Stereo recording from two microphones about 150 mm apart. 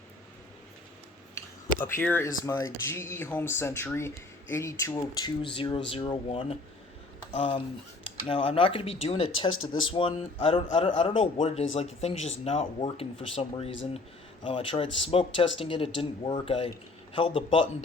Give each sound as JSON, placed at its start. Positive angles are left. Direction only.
{"t": 1.4, "sound": "speech", "side_deg": 15}